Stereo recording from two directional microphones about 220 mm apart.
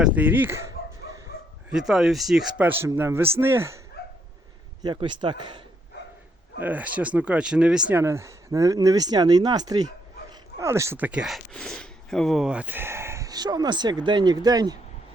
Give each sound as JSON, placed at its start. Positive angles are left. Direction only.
{"t": 0.0, "sound": "speech", "side_deg": -5}
{"t": 1.7, "sound": "speech", "side_deg": 0}
{"t": 4.0, "sound": "dog", "side_deg": 45}
{"t": 4.8, "sound": "speech", "side_deg": -20}
{"t": 6.6, "sound": "speech", "side_deg": -5}